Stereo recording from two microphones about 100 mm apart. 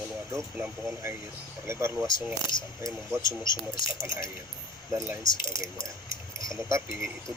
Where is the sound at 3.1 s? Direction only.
30° right (ahead or behind).